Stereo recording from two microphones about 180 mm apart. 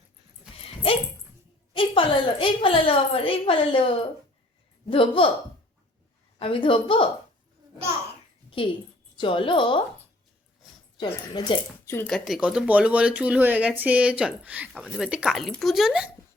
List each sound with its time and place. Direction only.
1.7 s a woman's voice: 30° left (ahead or behind)
4.9 s a woman's voice: 30° left (ahead or behind)
6.4 s a woman's voice: 30° left (ahead or behind)
8.6 s a woman's voice: 30° left (ahead or behind)
10.9 s a woman's voice: 25° left (ahead or behind)
11.9 s speech: 5° left (ahead or behind)